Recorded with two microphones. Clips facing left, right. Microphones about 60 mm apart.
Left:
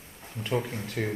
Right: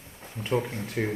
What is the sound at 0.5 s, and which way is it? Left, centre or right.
Speech, right.